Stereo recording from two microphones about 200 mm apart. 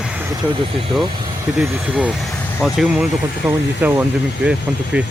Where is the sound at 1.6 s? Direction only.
5° right (ahead or behind).